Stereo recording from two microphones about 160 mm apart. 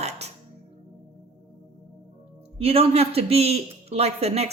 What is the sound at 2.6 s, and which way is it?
A woman's voice, 40° right (ahead or behind).